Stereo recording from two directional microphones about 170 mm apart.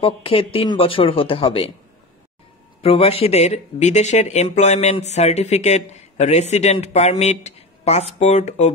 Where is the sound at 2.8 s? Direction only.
35° left (ahead or behind).